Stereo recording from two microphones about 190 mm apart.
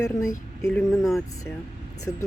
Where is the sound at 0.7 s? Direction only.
5° left (ahead or behind).